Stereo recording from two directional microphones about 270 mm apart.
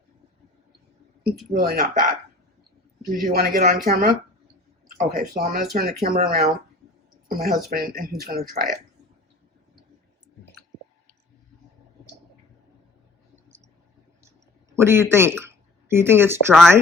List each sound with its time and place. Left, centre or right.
1.5 s speech: right
14.7 s speech: centre